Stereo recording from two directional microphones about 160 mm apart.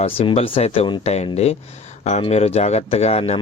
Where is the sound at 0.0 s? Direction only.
40° left (ahead or behind).